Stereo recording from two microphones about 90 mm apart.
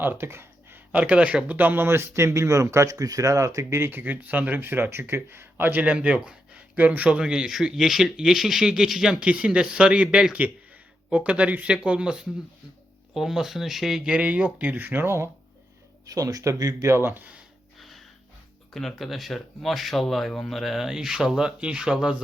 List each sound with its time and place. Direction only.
0.0 s a sound: 25° right (ahead or behind)
0.9 s speech: 15° right (ahead or behind)
16.0 s speech: 40° right (ahead or behind)
16.9 s speech: 25° right (ahead or behind)
17.7 s music: centre (ahead or behind)
18.7 s speech: centre (ahead or behind)